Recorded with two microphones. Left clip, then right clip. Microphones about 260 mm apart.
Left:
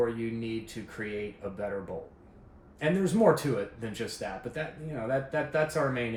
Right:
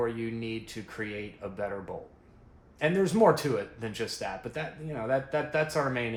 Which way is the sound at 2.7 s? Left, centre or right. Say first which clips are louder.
Right 2 dB; right.